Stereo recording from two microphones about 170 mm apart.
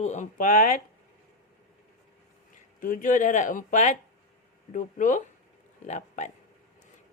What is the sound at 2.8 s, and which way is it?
A woman's voice, 50° left (ahead or behind).